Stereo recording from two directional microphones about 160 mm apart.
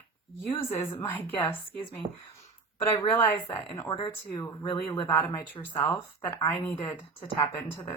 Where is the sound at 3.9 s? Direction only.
30° left (ahead or behind).